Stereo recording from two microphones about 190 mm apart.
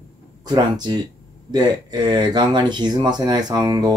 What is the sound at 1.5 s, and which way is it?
Speech, 20° right (ahead or behind).